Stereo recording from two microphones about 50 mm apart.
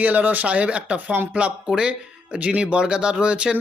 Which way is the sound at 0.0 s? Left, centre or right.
Right.